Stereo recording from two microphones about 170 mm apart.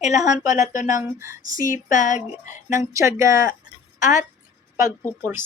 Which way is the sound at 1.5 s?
50° left (ahead or behind).